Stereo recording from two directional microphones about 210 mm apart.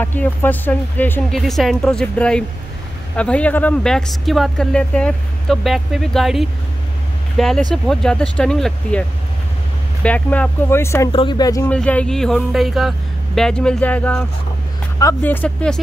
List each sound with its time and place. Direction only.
0.0 s speech: 10° left (ahead or behind)
10.0 s speech: 5° left (ahead or behind)
11.1 s speech: 25° left (ahead or behind)
11.7 s speech: 5° left (ahead or behind)